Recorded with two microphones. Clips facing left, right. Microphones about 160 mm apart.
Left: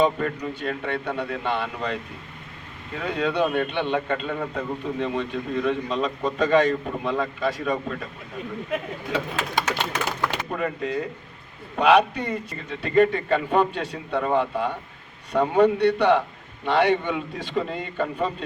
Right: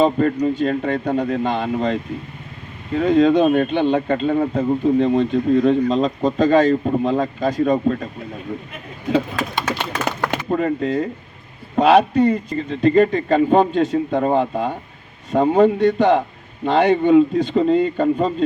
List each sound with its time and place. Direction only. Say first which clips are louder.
0.0 s a man's voice: right 6 dB; 35° right (ahead or behind)
10.2 s a man's voice: right 6 dB; 45° right (ahead or behind)